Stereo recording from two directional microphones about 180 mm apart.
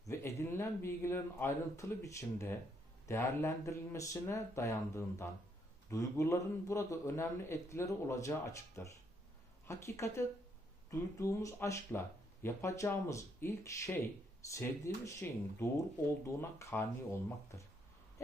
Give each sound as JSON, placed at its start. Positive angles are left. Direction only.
{"t": 0.0, "sound": "a man's voice", "side_deg": 15}